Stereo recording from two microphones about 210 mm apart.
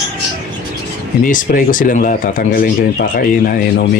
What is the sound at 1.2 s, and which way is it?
Speech, 40° left (ahead or behind).